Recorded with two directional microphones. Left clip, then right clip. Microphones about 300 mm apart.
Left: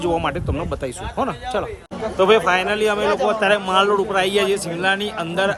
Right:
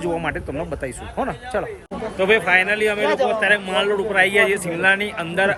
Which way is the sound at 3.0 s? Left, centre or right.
Right.